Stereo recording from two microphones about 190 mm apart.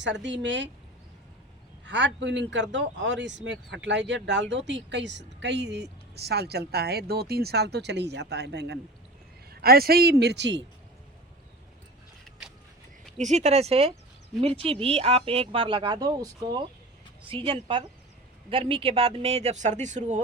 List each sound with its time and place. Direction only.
0.0 s speech: 70° right (ahead or behind)
1.8 s speech: 70° right (ahead or behind)
13.1 s speech: 35° right (ahead or behind)